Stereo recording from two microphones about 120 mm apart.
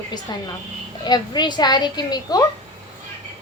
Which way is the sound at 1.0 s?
35° left (ahead or behind).